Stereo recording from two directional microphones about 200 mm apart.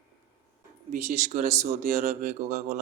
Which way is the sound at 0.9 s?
35° right (ahead or behind).